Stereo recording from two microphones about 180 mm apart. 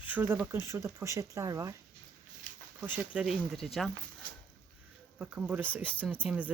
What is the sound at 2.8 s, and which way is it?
Speech, 10° right (ahead or behind).